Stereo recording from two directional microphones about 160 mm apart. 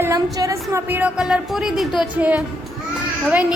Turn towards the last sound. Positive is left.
turn(degrees=-10)  # may be behind; listen again after turning